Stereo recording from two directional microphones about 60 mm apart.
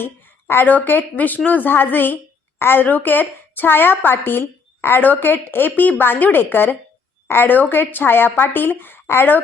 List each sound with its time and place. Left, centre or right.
0.0 s a woman's voice: left